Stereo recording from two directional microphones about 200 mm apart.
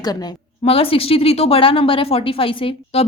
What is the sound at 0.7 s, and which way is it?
Speech, 30° left (ahead or behind).